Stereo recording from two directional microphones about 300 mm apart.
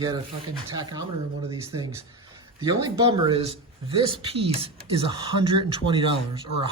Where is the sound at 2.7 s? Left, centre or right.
Centre.